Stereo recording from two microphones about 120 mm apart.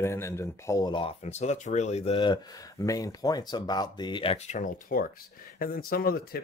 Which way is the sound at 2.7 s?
30° left (ahead or behind).